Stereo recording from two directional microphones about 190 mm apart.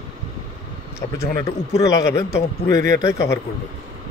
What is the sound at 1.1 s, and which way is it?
A man's voice, 15° left (ahead or behind).